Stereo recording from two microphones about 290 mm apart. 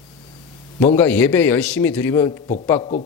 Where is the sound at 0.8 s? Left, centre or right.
Centre.